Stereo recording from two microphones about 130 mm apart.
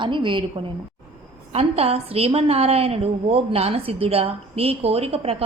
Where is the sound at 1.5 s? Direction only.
50° right (ahead or behind).